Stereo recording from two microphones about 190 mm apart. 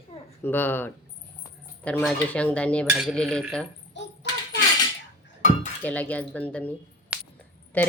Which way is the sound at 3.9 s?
70° left (ahead or behind).